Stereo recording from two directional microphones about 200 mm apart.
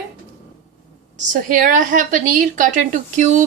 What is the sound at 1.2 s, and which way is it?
A woman's voice, 40° right (ahead or behind).